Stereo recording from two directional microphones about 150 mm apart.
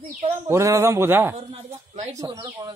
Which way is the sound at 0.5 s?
20° right (ahead or behind).